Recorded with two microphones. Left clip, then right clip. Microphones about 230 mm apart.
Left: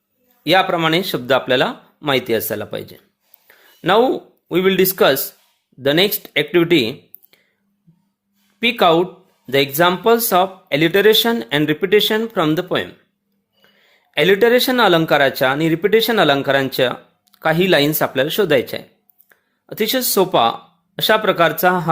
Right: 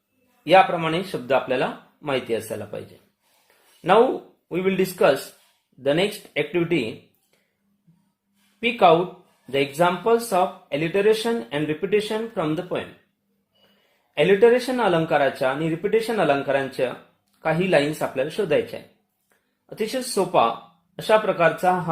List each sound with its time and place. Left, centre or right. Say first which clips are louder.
0.4 s speech: left 2 dB; left
3.4 s a sound: left 4 dB; left
4.4 s speech: left 8 dB; left
8.6 s speech: left 3 dB; left
14.1 s speech: left 3 dB; left